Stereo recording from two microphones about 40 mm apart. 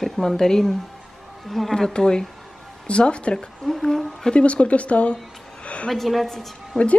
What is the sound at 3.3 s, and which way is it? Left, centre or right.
Speech, centre.